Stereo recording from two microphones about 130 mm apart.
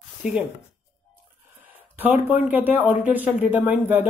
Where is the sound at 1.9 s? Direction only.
15° right (ahead or behind).